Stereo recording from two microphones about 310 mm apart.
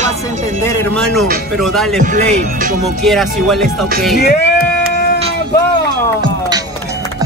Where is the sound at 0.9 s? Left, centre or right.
Centre.